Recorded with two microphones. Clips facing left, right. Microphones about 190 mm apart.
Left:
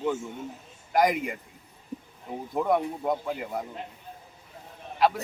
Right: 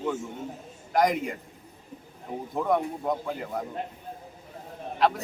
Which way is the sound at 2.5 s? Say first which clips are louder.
Left 1 dB; 5° left (ahead or behind).